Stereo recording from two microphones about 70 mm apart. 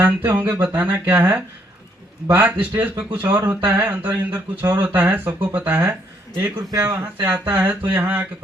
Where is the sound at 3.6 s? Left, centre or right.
Right.